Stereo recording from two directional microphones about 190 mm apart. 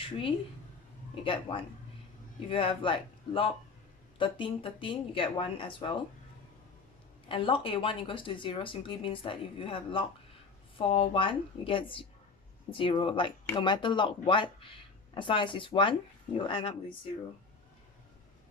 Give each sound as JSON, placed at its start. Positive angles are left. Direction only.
{"t": 0.0, "sound": "a woman's voice", "side_deg": 30}
{"t": 7.3, "sound": "speech", "side_deg": 25}